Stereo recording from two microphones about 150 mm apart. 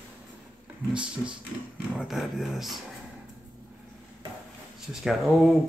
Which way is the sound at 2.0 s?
Centre (ahead or behind).